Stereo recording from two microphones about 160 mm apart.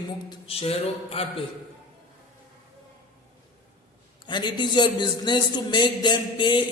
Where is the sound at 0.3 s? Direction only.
35° left (ahead or behind).